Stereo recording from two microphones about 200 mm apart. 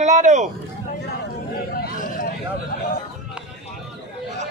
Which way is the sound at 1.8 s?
45° left (ahead or behind).